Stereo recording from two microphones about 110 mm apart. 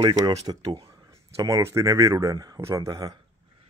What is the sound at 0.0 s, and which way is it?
Speech, 35° right (ahead or behind).